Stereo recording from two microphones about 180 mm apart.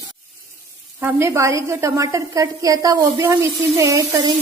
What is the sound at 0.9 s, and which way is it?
A woman's voice, 15° right (ahead or behind).